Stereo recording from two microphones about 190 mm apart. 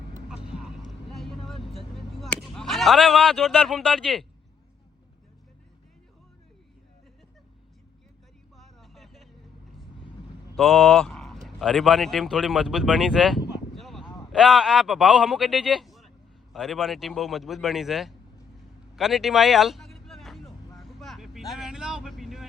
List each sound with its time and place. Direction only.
1.1 s vehicle: centre (ahead or behind)
1.7 s a sound: 30° left (ahead or behind)
2.2 s speech: centre (ahead or behind)
8.5 s vehicle: centre (ahead or behind)
10.6 s a man's voice: centre (ahead or behind)
18.9 s a sound: centre (ahead or behind)
20.7 s vehicle: centre (ahead or behind)